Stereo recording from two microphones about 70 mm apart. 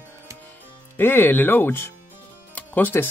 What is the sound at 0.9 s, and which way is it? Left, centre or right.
Speech, left.